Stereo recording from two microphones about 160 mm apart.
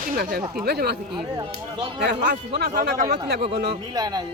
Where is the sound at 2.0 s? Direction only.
90° right.